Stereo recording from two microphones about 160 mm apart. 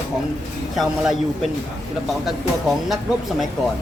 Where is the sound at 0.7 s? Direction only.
Centre (ahead or behind).